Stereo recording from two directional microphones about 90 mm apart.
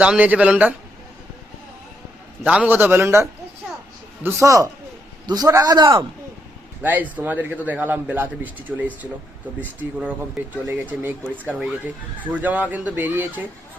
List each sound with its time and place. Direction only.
0.0 s speech: 15° right (ahead or behind)
2.4 s a man's voice: 15° right (ahead or behind); by 5.7 s 40° right (ahead or behind)
5.7 s a man's voice: 65° right (ahead or behind)
6.8 s speech: 20° right (ahead or behind)